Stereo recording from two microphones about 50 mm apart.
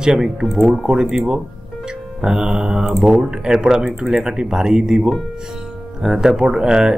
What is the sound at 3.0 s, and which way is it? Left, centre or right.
Speech, centre.